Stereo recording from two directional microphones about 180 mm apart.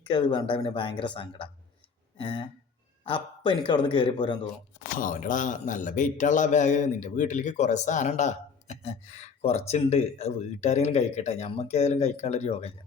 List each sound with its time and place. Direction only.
0.1 s speech: 25° left (ahead or behind)
2.1 s a sound: 30° left (ahead or behind)
3.0 s speech: 30° left (ahead or behind)
4.9 s a man's voice: 50° left (ahead or behind)